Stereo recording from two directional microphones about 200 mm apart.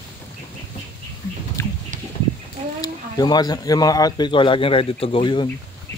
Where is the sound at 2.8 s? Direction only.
20° left (ahead or behind).